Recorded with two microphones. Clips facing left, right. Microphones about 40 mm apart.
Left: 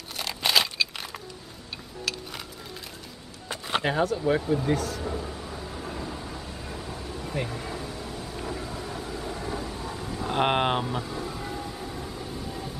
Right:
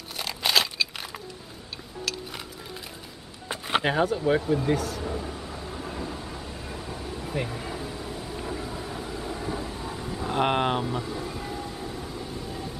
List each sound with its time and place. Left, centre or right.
0.2 s crunch: centre
2.1 s a sound: centre
3.4 s a sound: centre
4.2 s thunder: centre
10.3 s speech: centre
11.0 s vehicle: centre